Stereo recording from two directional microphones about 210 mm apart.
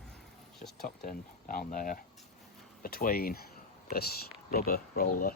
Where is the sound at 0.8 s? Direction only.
45° left (ahead or behind).